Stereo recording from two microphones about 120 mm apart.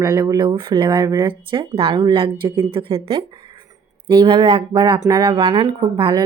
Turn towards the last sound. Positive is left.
turn(degrees=-45)  # may be behind; listen again after turning